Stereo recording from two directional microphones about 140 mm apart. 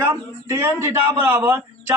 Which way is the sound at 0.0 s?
20° right (ahead or behind).